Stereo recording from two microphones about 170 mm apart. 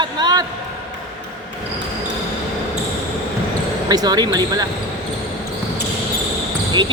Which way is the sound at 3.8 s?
20° right (ahead or behind).